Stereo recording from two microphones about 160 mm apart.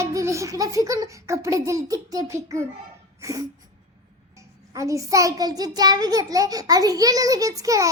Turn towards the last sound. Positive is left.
turn(degrees=-20)  # may be behind; listen again after turning